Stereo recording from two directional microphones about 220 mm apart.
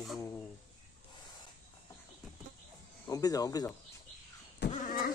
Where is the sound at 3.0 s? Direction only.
15° left (ahead or behind).